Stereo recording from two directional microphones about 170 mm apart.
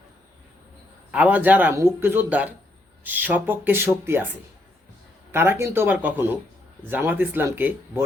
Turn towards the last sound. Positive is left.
turn(degrees=-10)  # may be behind; listen again after turning